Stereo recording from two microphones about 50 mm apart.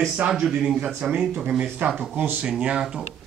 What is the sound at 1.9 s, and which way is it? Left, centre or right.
Speech, centre.